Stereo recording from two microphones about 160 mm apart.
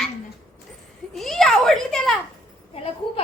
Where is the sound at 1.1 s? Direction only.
Centre (ahead or behind).